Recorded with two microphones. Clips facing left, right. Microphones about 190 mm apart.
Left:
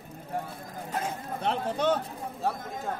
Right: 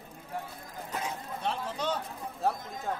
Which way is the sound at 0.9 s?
55° left (ahead or behind).